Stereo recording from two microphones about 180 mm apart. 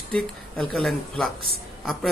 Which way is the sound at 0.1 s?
5° left (ahead or behind).